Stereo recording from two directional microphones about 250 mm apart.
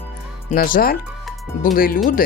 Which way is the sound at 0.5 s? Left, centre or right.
Left.